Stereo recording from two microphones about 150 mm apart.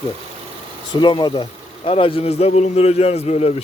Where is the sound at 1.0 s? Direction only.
30° left (ahead or behind).